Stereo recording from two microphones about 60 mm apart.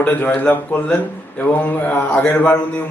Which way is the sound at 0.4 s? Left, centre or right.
Left.